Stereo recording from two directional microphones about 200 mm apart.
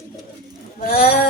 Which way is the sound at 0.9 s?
50° left (ahead or behind).